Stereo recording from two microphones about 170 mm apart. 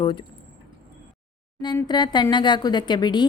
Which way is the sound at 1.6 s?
25° left (ahead or behind).